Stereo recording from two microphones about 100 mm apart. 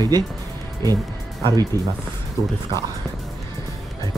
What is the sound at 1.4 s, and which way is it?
Speech, 40° right (ahead or behind).